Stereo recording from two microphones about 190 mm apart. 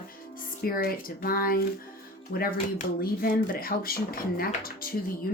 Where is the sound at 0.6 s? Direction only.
50° left (ahead or behind).